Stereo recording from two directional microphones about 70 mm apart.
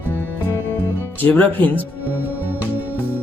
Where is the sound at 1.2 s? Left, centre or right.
Left.